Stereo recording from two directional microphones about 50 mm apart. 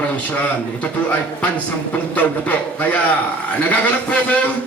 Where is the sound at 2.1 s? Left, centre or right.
Left.